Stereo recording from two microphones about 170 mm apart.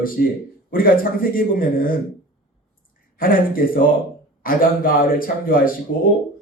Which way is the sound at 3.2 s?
55° left (ahead or behind).